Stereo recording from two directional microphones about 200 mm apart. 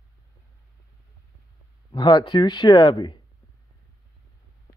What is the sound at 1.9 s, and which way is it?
A man's voice, 20° left (ahead or behind).